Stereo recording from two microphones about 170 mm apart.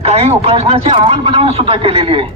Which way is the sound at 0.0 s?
40° right (ahead or behind).